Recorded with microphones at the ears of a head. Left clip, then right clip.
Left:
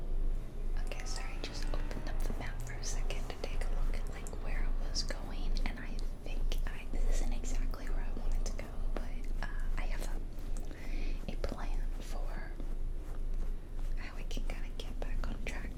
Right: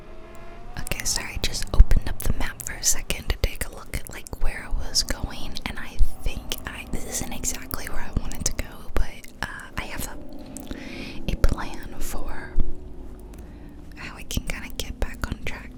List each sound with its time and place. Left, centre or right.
0.8 s whispering: right
14.0 s whispering: right